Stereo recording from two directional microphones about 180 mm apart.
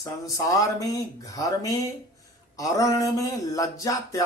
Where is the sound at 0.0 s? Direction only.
20° left (ahead or behind).